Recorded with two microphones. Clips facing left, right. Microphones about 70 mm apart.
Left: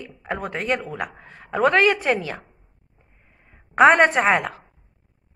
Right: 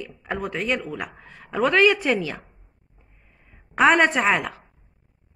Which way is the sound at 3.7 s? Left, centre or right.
Left.